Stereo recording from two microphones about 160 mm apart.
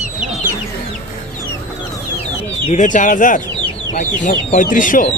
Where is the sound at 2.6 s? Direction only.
50° left (ahead or behind).